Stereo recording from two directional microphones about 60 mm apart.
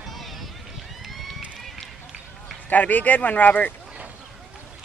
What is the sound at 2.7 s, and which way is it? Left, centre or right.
Speech, left.